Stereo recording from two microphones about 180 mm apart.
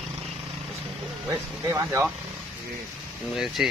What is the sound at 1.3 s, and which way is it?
Speech, 15° right (ahead or behind).